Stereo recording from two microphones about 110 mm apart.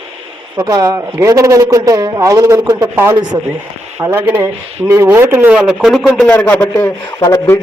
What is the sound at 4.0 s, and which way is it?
Speech, 20° right (ahead or behind).